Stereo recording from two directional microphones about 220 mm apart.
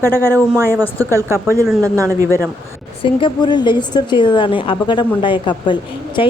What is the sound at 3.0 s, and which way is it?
A woman's voice, 25° left (ahead or behind).